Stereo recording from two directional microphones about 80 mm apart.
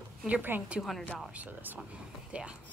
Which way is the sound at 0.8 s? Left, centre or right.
Centre.